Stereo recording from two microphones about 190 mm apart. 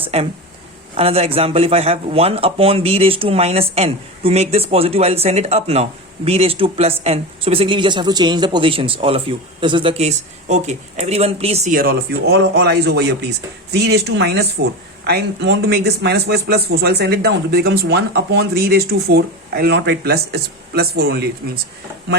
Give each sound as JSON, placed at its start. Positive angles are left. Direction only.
{"t": 0.1, "sound": "speech", "side_deg": -35}